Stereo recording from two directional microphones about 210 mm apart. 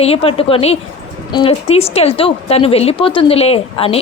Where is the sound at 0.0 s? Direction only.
30° left (ahead or behind).